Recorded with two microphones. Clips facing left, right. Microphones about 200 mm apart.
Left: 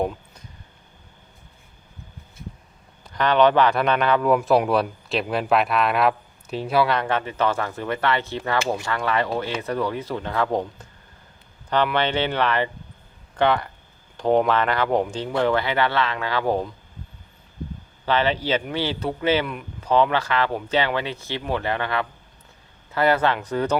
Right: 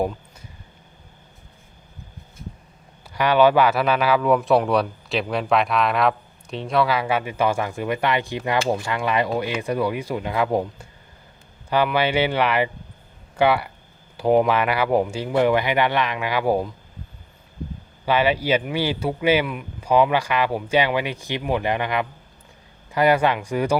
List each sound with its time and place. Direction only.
3.0 s speech: 10° right (ahead or behind)
18.0 s speech: 10° right (ahead or behind)